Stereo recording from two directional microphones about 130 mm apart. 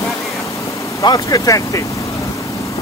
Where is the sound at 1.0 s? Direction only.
30° left (ahead or behind).